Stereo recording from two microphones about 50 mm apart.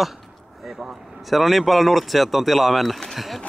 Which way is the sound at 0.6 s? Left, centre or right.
Centre.